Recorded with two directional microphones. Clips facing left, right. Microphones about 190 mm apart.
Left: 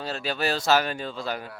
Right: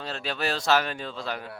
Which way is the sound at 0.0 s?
5° left (ahead or behind).